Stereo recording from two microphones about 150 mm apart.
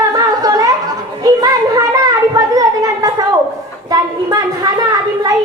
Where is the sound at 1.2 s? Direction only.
25° right (ahead or behind).